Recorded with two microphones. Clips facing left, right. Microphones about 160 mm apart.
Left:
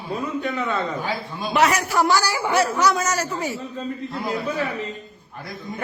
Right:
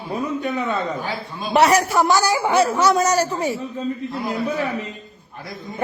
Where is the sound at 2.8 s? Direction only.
30° right (ahead or behind).